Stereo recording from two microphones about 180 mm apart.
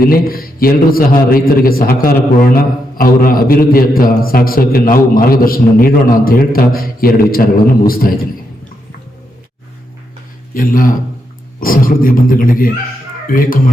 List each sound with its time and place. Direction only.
0.0 s a man's voice: 55° left (ahead or behind)
10.5 s a man's voice: 50° left (ahead or behind)